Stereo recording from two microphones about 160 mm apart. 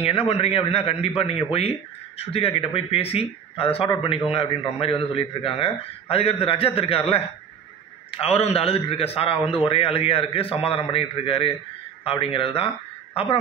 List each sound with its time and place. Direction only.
0.0 s speech: 35° left (ahead or behind)